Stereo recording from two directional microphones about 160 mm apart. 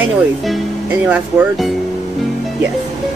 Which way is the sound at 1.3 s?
10° right (ahead or behind).